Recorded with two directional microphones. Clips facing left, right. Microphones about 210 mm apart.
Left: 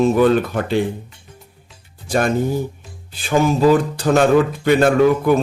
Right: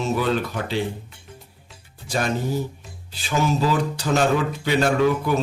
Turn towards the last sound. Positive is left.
turn(degrees=55)  # may be behind; listen again after turning